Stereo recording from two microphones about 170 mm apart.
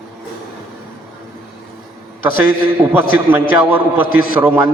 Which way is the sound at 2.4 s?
15° right (ahead or behind).